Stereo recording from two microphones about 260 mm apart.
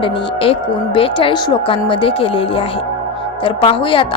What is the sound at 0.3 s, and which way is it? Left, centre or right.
A woman's voice, left.